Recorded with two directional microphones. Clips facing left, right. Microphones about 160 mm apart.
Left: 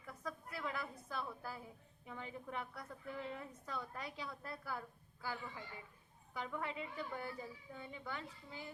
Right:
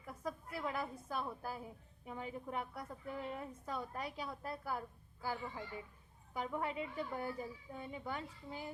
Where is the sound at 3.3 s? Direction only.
35° right (ahead or behind).